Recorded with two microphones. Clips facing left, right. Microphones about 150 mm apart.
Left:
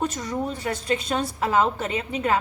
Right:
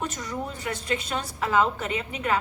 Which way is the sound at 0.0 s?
30° left (ahead or behind).